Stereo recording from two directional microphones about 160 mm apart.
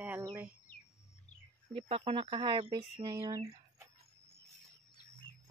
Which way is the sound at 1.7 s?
35° right (ahead or behind).